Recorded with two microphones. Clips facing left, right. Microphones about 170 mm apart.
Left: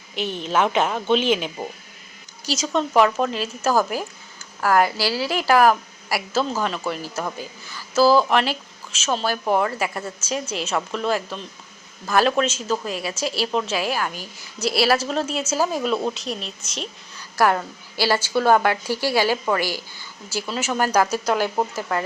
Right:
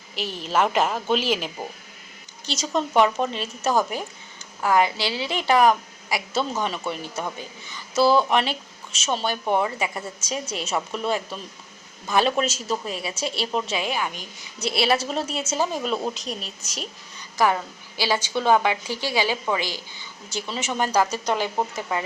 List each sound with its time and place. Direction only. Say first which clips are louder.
0.2 s a woman's voice: left 2 dB; centre (ahead or behind)
2.7 s a woman's voice: left 2 dB; centre (ahead or behind)
18.2 s speech: left 2 dB; 5° left (ahead or behind)
19.1 s a woman's voice: left 3 dB; 15° right (ahead or behind)
20.3 s a woman's voice: left 3 dB; 5° left (ahead or behind)